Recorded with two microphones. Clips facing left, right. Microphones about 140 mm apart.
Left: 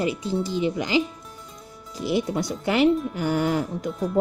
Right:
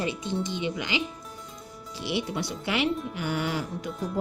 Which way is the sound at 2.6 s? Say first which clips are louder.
Left 8 dB; 40° left (ahead or behind).